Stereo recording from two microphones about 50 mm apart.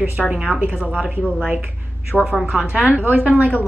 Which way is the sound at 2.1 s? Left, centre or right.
Centre.